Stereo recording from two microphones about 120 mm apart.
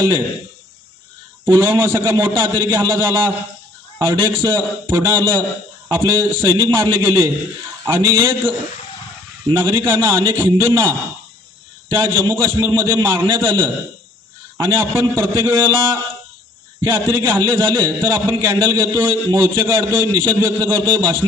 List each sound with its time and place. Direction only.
1.5 s a man's voice: 20° right (ahead or behind)
11.9 s a man's voice: 20° right (ahead or behind)
14.7 s a man's voice: 20° right (ahead or behind)